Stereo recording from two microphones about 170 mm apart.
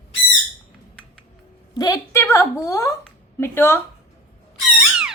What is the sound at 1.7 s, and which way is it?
A woman's voice, 20° left (ahead or behind).